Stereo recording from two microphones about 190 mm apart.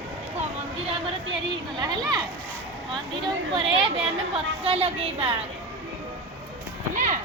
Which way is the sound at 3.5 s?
30° right (ahead or behind).